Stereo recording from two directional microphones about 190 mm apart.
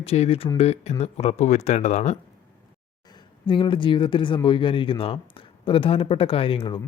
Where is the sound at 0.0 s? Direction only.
30° left (ahead or behind).